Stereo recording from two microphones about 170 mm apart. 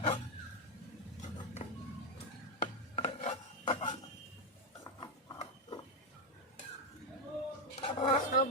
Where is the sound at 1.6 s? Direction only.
40° left (ahead or behind).